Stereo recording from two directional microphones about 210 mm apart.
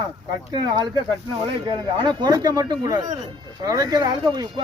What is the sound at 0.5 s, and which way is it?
Speech, 20° right (ahead or behind).